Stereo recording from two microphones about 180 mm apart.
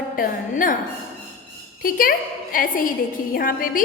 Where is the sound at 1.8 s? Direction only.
50° left (ahead or behind).